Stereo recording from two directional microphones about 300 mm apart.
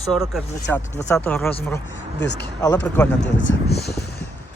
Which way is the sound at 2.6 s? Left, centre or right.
Centre.